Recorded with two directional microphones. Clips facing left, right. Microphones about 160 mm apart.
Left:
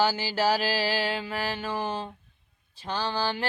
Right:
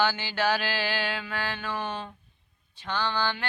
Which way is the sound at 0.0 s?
35° left (ahead or behind).